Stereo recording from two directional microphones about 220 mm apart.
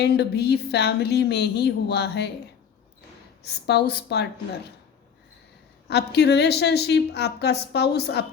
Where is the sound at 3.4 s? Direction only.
50° left (ahead or behind).